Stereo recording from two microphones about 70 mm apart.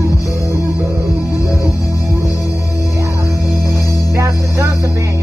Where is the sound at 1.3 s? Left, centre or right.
Left.